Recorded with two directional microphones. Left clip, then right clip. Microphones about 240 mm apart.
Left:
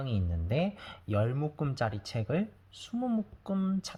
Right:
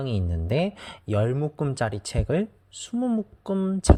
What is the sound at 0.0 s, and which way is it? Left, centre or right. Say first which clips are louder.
Speech: right 7 dB; right.